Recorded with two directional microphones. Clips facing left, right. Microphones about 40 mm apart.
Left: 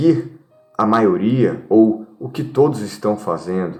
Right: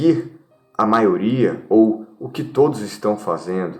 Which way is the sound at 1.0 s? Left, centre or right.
Right.